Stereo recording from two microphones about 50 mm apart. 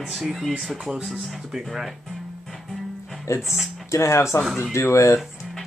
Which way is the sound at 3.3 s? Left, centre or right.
Left.